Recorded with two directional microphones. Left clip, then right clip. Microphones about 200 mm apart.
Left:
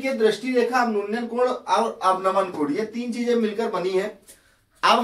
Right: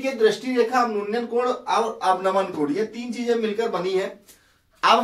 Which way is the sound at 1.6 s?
15° left (ahead or behind).